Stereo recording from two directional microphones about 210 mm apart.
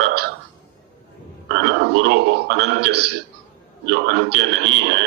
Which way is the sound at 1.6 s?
55° right (ahead or behind).